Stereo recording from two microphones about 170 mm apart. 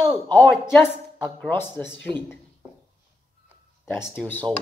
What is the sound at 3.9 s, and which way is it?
Speech, 10° left (ahead or behind).